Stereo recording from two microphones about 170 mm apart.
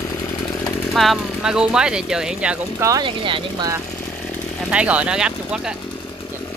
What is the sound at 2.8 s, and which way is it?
Speech, 25° right (ahead or behind).